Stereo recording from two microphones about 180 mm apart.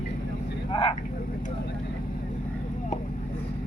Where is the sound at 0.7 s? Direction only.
30° left (ahead or behind).